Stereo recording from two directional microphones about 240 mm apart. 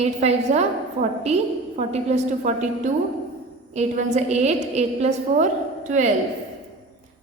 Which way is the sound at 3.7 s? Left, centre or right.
Right.